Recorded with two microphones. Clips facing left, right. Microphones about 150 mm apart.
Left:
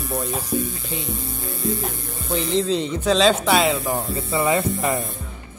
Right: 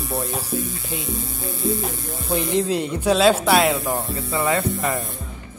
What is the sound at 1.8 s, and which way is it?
Speech, 10° right (ahead or behind).